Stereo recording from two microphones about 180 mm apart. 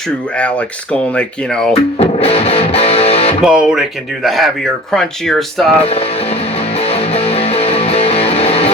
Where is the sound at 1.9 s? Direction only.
35° left (ahead or behind).